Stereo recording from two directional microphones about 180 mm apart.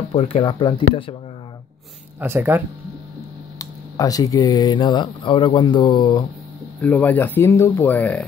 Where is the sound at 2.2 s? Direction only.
10° right (ahead or behind).